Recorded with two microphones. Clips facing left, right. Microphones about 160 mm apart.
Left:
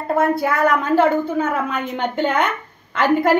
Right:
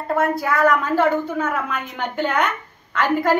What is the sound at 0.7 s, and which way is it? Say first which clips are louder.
A woman's voice: left 2 dB; 25° left (ahead or behind).